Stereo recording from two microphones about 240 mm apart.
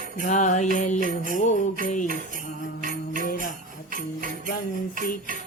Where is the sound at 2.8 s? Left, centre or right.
Right.